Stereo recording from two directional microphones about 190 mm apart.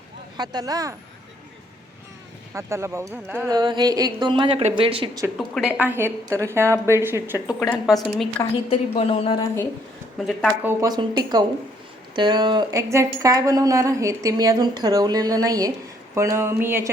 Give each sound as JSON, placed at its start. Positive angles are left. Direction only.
{"t": 0.3, "sound": "a woman's voice", "side_deg": -20}
{"t": 2.5, "sound": "a woman's voice", "side_deg": -15}
{"t": 5.4, "sound": "a woman's voice", "side_deg": -5}
{"t": 7.6, "sound": "a woman's voice", "side_deg": 0}
{"t": 8.7, "sound": "speech", "side_deg": 30}
{"t": 10.2, "sound": "a woman's voice", "side_deg": 0}
{"t": 10.6, "sound": "a woman's voice", "side_deg": -15}